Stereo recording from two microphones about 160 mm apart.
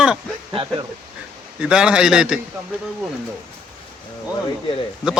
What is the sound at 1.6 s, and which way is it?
Speech, 5° right (ahead or behind).